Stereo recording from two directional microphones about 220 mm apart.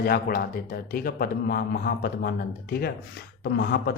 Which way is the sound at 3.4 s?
45° left (ahead or behind).